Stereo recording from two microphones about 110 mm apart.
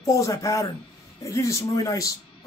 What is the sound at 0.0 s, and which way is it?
Speech, 30° left (ahead or behind).